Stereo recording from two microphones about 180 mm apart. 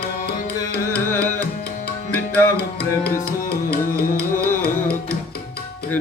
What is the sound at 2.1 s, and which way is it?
Tabla, 10° left (ahead or behind).